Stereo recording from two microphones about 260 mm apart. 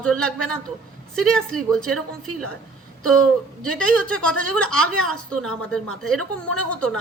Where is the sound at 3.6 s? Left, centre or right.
Centre.